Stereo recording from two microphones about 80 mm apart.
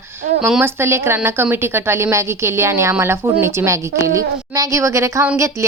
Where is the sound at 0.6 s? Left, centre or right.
Right.